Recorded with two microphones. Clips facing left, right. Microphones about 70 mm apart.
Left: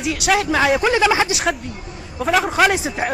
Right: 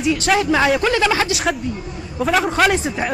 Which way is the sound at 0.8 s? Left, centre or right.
Centre.